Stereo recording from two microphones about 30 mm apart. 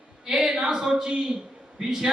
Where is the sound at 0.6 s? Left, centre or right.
Right.